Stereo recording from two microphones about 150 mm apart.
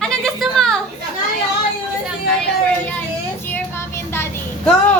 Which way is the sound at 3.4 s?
15° left (ahead or behind).